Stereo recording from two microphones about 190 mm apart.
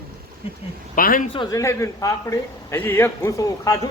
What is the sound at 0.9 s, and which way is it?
Speech, 45° left (ahead or behind).